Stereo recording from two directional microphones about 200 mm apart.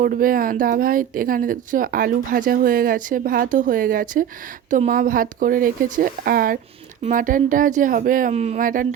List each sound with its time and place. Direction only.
0.0 s speech: 45° right (ahead or behind)